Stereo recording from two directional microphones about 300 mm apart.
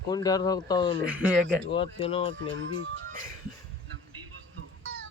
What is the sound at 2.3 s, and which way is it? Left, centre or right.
Speech, right.